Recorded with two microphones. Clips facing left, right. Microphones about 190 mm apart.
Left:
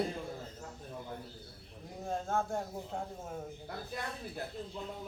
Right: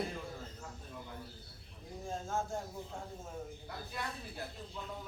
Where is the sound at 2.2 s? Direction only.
60° left (ahead or behind).